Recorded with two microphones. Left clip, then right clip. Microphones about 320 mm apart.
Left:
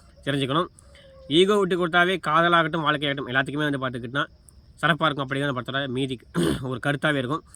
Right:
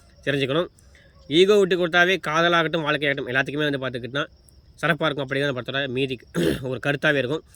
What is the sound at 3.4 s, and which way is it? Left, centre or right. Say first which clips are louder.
Speech: right 1 dB; left.